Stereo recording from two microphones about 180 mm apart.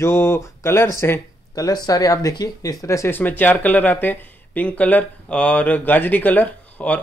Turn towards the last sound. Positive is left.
turn(degrees=10)  # may be behind; listen again after turning